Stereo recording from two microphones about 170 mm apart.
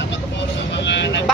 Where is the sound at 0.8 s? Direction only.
90° left.